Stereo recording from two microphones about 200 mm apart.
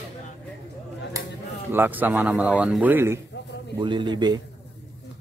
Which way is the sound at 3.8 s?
25° right (ahead or behind).